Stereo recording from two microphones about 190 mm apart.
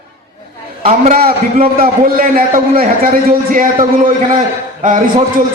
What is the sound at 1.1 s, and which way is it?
A man's voice, 50° right (ahead or behind).